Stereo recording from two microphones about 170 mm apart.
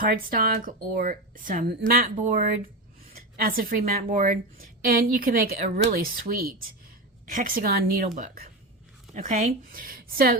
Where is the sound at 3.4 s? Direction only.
55° right (ahead or behind).